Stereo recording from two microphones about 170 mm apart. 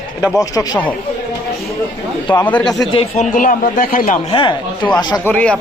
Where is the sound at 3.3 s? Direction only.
55° left (ahead or behind).